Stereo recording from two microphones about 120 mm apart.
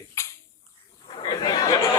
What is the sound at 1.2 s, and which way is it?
Speech, 40° left (ahead or behind).